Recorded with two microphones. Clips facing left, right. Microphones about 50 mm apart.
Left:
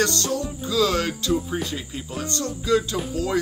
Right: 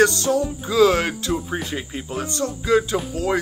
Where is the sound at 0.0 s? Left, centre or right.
Centre.